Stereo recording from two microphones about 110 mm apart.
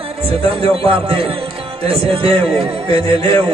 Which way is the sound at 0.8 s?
55° right (ahead or behind).